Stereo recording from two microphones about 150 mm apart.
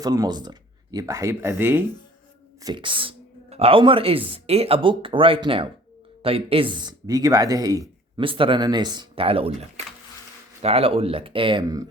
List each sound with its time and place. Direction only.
0.0 s speech: 25° right (ahead or behind)
2.6 s speech: 35° right (ahead or behind)
8.2 s speech: 35° right (ahead or behind)
11.6 s speech: 25° right (ahead or behind)